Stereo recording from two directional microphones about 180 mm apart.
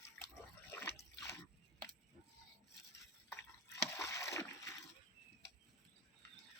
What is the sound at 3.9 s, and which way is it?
Rowboat, 15° left (ahead or behind).